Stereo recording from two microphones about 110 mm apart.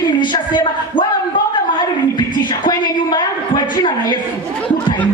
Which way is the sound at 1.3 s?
45° left (ahead or behind).